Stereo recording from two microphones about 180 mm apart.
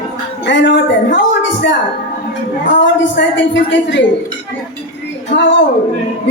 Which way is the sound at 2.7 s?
90° left.